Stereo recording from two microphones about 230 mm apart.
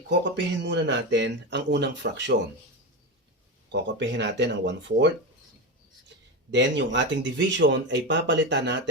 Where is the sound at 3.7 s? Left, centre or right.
Right.